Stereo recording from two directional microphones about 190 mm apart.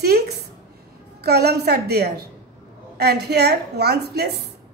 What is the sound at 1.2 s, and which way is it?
A woman's voice, 60° right (ahead or behind).